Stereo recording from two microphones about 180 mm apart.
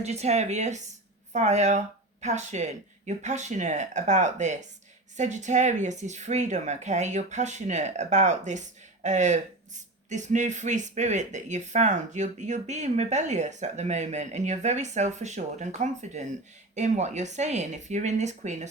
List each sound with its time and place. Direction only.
0.0 s speech: 35° right (ahead or behind)